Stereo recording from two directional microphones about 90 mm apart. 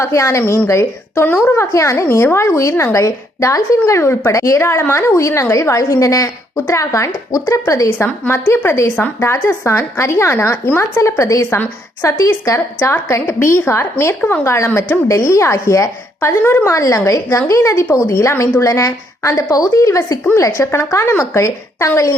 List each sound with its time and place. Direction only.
0.0 s a woman's voice: 30° left (ahead or behind)